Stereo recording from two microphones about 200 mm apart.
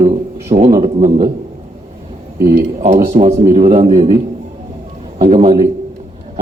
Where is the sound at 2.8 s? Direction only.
40° right (ahead or behind).